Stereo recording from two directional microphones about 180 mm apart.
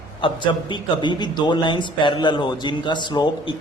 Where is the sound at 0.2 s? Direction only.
25° left (ahead or behind).